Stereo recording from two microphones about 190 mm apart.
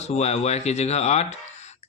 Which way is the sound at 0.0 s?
35° left (ahead or behind).